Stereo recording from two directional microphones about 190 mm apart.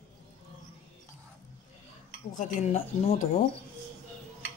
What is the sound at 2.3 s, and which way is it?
Dishes, 35° left (ahead or behind).